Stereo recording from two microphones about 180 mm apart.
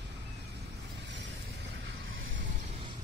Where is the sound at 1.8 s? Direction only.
90° right.